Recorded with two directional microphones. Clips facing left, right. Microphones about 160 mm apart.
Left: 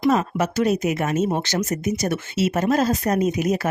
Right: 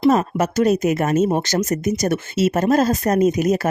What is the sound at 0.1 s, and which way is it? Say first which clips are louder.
Speech: right 3 dB; 45° right (ahead or behind).